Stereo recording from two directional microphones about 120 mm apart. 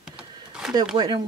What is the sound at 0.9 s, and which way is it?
Speech, 35° right (ahead or behind).